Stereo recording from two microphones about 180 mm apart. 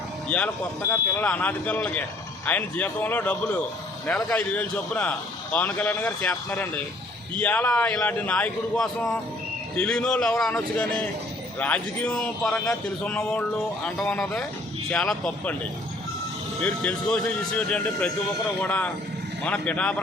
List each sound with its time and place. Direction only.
0.3 s a man's voice: 10° left (ahead or behind)
16.6 s a man's voice: 5° left (ahead or behind)